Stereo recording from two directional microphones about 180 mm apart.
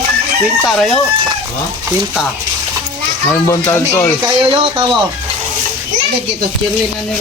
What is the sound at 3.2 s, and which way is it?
Speech, 15° left (ahead or behind).